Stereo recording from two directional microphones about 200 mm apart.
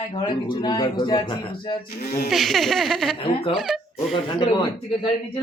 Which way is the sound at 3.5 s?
Centre (ahead or behind).